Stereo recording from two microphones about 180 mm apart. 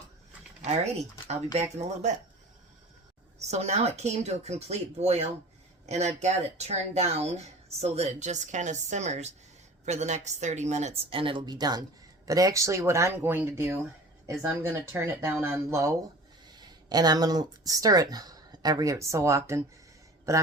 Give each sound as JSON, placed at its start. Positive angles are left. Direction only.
{"t": 0.6, "sound": "speech", "side_deg": -35}
{"t": 3.3, "sound": "speech", "side_deg": -40}